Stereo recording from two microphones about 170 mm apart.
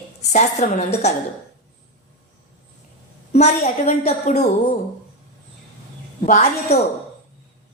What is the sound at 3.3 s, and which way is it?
A woman's voice, 40° left (ahead or behind).